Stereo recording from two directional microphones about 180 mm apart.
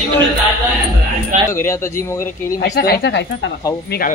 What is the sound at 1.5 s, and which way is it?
Speech, 15° left (ahead or behind).